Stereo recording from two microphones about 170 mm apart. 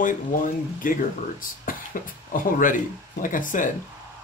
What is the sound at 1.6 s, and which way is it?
Speech, 55° left (ahead or behind).